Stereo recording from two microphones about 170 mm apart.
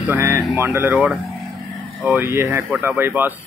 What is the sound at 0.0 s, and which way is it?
Speech, 15° right (ahead or behind).